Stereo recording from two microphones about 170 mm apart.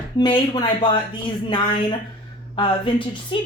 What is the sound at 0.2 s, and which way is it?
Speech, 25° left (ahead or behind).